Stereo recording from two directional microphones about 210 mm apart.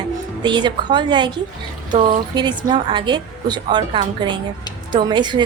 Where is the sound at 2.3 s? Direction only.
20° right (ahead or behind).